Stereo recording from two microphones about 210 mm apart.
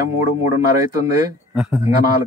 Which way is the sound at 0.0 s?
35° left (ahead or behind).